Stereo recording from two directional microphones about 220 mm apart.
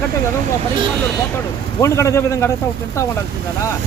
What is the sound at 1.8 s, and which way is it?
Speech, 15° left (ahead or behind).